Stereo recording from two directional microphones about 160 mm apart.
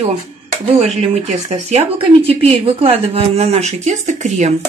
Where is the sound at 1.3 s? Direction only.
45° right (ahead or behind).